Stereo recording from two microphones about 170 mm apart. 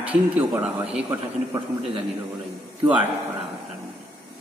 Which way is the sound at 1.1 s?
25° right (ahead or behind).